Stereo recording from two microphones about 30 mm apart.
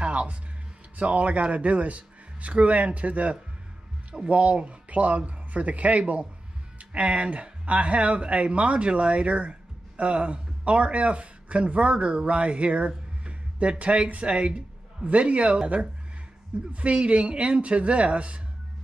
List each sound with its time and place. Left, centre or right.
0.0 s music: right
0.9 s speech: right
6.8 s music: right
7.2 s speech: right
14.0 s speech: right
14.3 s speech: right
16.7 s speech: right